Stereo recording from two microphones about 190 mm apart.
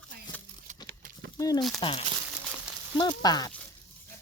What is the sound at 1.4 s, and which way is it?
Speech, 20° left (ahead or behind).